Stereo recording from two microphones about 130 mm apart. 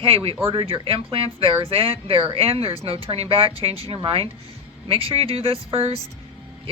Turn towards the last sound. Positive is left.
turn(degrees=-45)  # may be behind; listen again after turning